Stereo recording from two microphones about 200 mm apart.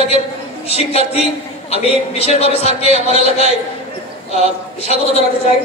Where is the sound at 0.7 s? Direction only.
30° left (ahead or behind).